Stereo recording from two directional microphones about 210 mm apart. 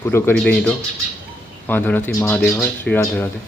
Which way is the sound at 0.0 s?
10° left (ahead or behind).